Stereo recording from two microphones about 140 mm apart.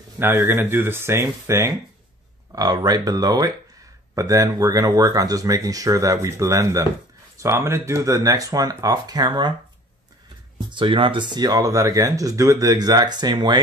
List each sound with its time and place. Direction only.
0.2 s speech: 15° right (ahead or behind)
10.7 s speech: 35° right (ahead or behind)